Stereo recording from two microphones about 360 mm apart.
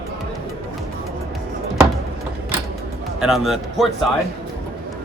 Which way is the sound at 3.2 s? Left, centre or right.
Centre.